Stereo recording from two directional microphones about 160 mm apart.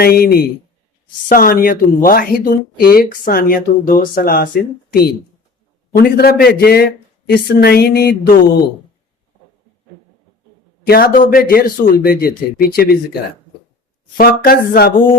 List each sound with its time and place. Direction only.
0.0 s a man's voice: 70° left (ahead or behind)
10.8 s a man's voice: 75° left (ahead or behind)
14.2 s a man's voice: 70° left (ahead or behind)